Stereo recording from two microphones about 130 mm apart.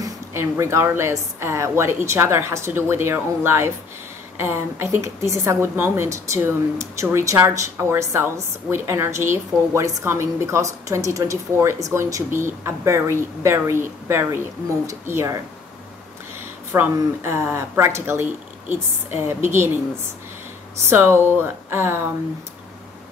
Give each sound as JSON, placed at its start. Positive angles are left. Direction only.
{"t": 0.0, "sound": "a woman's voice", "side_deg": -20}
{"t": 16.7, "sound": "a woman's voice", "side_deg": -15}
{"t": 20.7, "sound": "speech", "side_deg": -20}